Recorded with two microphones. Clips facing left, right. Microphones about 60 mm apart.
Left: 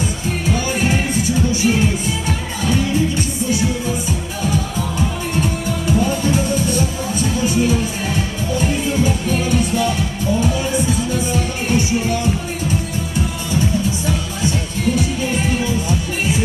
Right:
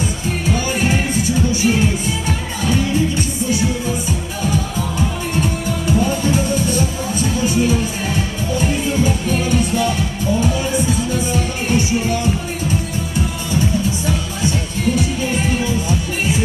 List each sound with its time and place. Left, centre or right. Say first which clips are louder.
5.4 s music: even; right
8.5 s music: even; right
11.3 s music: even; right